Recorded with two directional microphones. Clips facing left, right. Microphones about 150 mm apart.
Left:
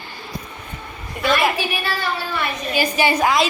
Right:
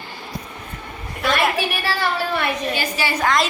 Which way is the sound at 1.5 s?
70° right (ahead or behind).